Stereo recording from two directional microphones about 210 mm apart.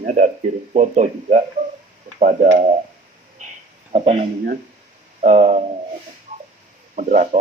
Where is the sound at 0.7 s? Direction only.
35° right (ahead or behind).